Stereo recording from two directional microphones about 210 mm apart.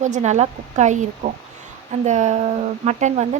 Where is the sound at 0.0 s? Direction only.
35° right (ahead or behind).